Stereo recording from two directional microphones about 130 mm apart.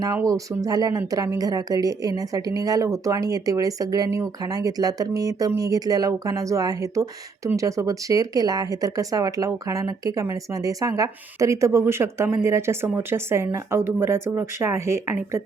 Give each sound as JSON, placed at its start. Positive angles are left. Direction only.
{"t": 0.0, "sound": "speech", "side_deg": -25}